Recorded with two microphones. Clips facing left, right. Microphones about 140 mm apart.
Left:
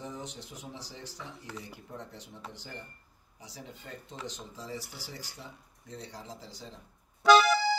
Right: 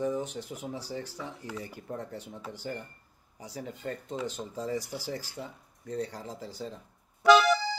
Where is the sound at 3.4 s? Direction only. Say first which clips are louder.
Right 9 dB; 50° right (ahead or behind).